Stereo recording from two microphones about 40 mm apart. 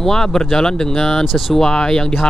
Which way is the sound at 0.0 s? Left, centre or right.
Centre.